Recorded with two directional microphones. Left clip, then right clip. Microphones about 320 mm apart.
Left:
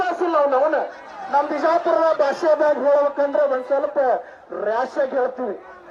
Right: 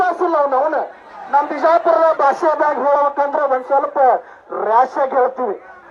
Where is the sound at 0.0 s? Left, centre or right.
Centre.